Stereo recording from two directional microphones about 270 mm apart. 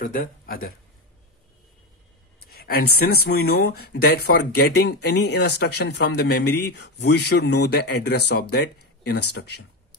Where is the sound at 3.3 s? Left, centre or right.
Left.